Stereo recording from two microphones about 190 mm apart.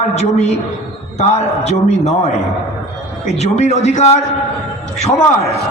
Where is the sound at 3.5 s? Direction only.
35° left (ahead or behind).